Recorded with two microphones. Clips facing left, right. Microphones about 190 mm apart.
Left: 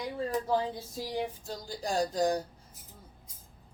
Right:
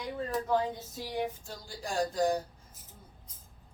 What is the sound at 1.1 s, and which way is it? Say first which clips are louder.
A woman's voice: right 1 dB; 40° left (ahead or behind).